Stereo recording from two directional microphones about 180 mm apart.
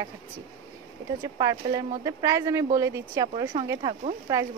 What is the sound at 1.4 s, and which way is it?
Speech, 20° right (ahead or behind).